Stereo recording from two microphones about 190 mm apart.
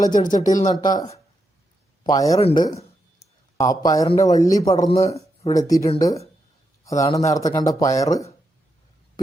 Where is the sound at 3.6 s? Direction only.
20° left (ahead or behind).